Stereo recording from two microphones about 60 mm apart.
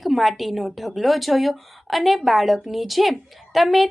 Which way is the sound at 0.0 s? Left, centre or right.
Centre.